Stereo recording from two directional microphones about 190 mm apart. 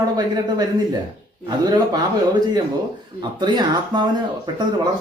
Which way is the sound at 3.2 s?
20° right (ahead or behind).